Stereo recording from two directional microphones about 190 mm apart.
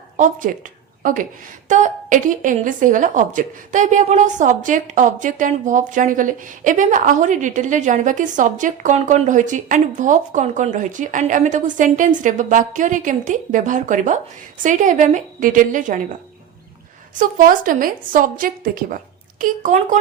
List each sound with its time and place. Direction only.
0.2 s a woman's voice: 45° right (ahead or behind)
17.2 s a woman's voice: 45° right (ahead or behind)